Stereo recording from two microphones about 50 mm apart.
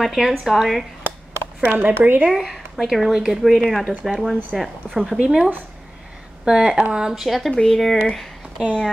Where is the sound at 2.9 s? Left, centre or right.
Centre.